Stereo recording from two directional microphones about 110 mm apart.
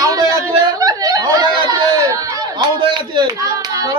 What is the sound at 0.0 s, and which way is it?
Chatter, 35° right (ahead or behind).